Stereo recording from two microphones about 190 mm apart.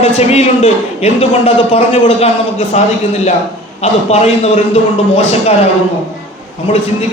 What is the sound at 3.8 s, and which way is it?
A man's voice, 35° left (ahead or behind).